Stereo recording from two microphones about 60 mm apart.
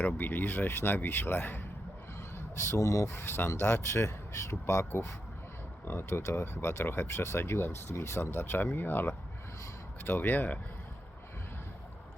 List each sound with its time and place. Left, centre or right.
0.0 s speech: left
2.6 s speech: left
3.1 s speech: left